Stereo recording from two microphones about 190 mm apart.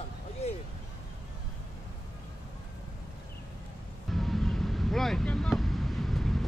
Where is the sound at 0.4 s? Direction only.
35° left (ahead or behind).